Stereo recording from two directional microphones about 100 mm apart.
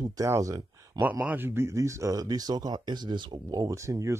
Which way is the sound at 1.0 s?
15° right (ahead or behind).